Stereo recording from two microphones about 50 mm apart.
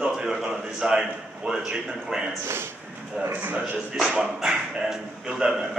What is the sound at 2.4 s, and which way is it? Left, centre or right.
Speech, right.